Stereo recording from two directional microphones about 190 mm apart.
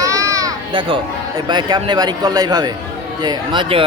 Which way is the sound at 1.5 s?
20° right (ahead or behind).